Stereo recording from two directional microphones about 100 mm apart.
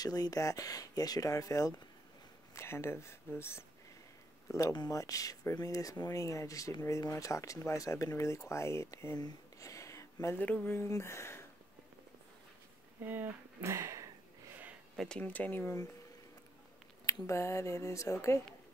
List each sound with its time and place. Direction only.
0.0 s speech: 40° left (ahead or behind)
9.2 s a sound: 30° left (ahead or behind)
10.4 s speech: 10° left (ahead or behind)
10.9 s speech: 30° left (ahead or behind)
13.0 s speech: 20° right (ahead or behind)
15.0 s speech: 10° left (ahead or behind)
17.0 s speech: 30° left (ahead or behind)